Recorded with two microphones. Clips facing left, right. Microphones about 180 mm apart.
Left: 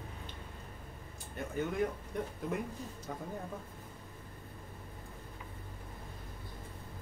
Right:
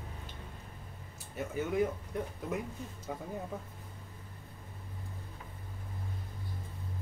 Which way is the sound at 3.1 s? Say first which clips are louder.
Right 2 dB; 10° right (ahead or behind).